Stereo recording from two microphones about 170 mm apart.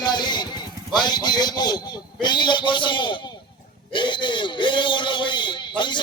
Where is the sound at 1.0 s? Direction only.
25° left (ahead or behind).